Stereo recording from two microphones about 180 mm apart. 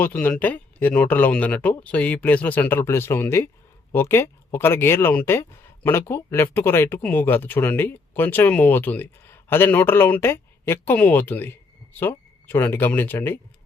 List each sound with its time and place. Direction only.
0.0 s speech: 10° left (ahead or behind)